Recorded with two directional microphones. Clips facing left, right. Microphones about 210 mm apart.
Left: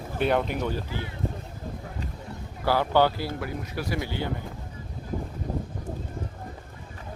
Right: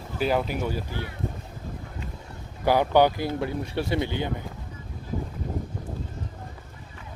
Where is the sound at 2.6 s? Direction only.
15° right (ahead or behind).